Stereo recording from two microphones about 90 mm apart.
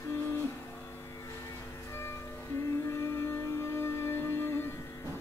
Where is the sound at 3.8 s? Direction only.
25° left (ahead or behind).